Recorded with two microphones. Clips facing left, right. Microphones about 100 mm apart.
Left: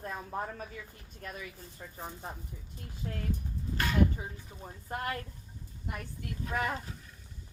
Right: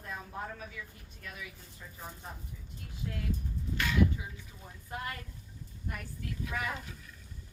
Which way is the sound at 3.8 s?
40° left (ahead or behind).